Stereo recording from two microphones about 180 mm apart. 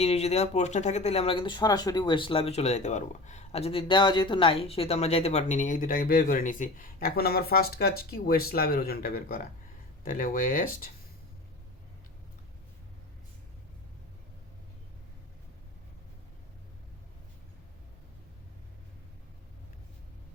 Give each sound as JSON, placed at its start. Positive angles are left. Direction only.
{"t": 0.0, "sound": "speech", "side_deg": 35}